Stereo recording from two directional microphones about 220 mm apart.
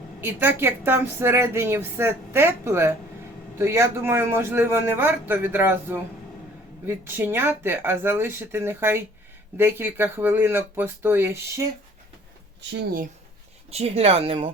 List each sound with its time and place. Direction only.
0.2 s speech: 10° right (ahead or behind)
12.7 s speech: 40° right (ahead or behind)
13.7 s speech: 30° right (ahead or behind)